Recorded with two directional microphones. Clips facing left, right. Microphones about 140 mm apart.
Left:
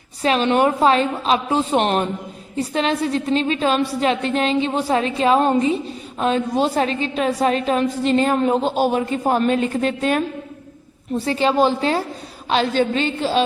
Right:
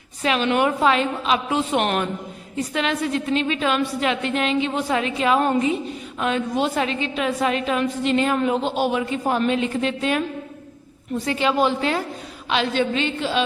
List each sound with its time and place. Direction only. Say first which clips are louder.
0.2 s a woman's voice: left 3 dB; 35° left (ahead or behind)